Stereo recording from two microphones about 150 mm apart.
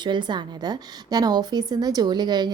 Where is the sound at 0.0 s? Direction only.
30° right (ahead or behind).